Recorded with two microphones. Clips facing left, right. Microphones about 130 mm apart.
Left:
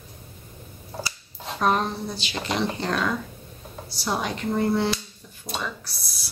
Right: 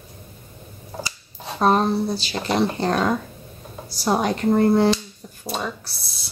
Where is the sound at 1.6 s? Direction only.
35° right (ahead or behind).